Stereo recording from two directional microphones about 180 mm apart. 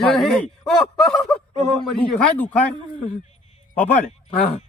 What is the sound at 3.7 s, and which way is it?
Speech, 10° left (ahead or behind).